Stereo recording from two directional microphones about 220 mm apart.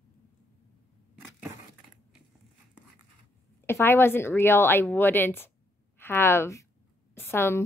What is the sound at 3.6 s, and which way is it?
A woman's voice, 10° left (ahead or behind).